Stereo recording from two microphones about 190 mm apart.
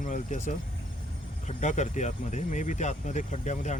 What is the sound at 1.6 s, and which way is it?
Speech, 40° left (ahead or behind).